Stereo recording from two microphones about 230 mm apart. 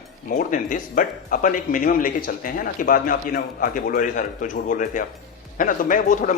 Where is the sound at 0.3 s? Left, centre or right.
Left.